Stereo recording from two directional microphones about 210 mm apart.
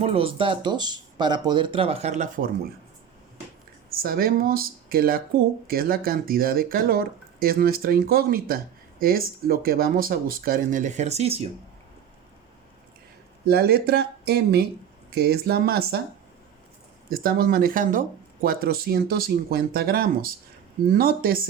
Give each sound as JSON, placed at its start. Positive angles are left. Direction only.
{"t": 0.0, "sound": "speech", "side_deg": -25}
{"t": 4.0, "sound": "speech", "side_deg": -45}
{"t": 13.5, "sound": "speech", "side_deg": -50}
{"t": 17.1, "sound": "speech", "side_deg": -45}